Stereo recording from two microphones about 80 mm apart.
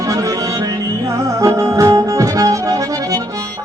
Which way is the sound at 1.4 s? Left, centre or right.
Right.